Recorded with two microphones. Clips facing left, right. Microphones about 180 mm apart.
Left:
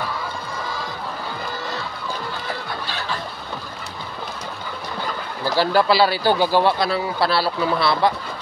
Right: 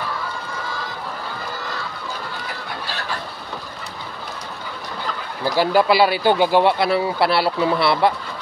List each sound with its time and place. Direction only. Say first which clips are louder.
5.6 s speech: right 1 dB; 20° right (ahead or behind)